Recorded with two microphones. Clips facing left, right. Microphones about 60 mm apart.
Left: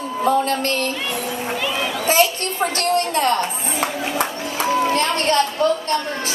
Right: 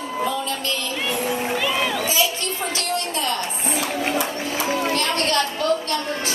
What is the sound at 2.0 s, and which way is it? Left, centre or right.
A woman's voice, left.